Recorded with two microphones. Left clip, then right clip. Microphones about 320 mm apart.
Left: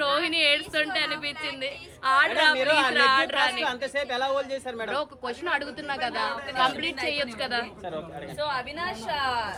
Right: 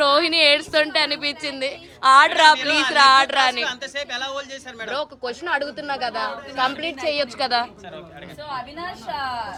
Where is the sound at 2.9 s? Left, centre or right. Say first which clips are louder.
Right 7 dB; centre.